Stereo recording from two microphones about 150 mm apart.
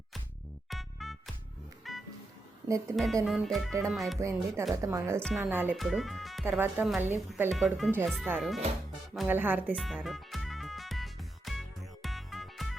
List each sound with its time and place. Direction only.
0.7 s music: centre (ahead or behind)
2.9 s speech: centre (ahead or behind)
4.2 s speech: 20° right (ahead or behind)
5.2 s speech: centre (ahead or behind)
5.5 s speech: 10° right (ahead or behind)
5.7 s speech: centre (ahead or behind)
6.4 s speech: 15° right (ahead or behind)
7.5 s speech: centre (ahead or behind)
9.7 s music: centre (ahead or behind)